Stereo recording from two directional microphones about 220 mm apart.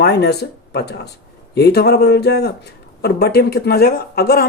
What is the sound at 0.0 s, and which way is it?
Speech, 50° left (ahead or behind).